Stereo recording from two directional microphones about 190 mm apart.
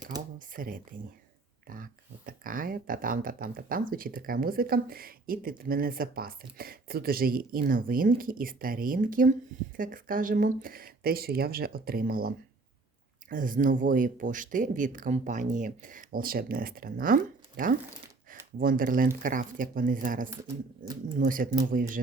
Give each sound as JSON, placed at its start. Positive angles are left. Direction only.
{"t": 0.3, "sound": "speech", "side_deg": -45}
{"t": 13.3, "sound": "speech", "side_deg": -45}
{"t": 18.5, "sound": "speech", "side_deg": -45}
{"t": 20.8, "sound": "speech", "side_deg": -20}
{"t": 21.2, "sound": "speech", "side_deg": -45}